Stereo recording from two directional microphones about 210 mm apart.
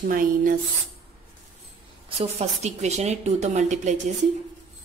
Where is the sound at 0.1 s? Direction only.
40° right (ahead or behind).